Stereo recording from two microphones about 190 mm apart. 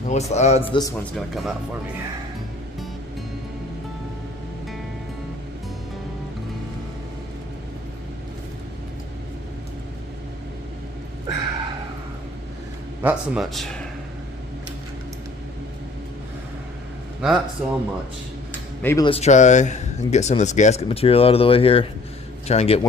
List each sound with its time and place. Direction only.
0.1 s speech: 35° left (ahead or behind)
1.3 s speech: centre (ahead or behind)
13.0 s speech: 5° right (ahead or behind)
17.2 s speech: 5° right (ahead or behind)
18.8 s speech: 10° left (ahead or behind)
19.0 s speech: 35° left (ahead or behind)